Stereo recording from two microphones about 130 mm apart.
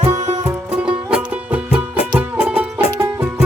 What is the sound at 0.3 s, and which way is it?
Music, 30° right (ahead or behind).